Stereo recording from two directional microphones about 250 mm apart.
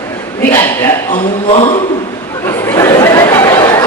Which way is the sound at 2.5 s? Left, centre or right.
Centre.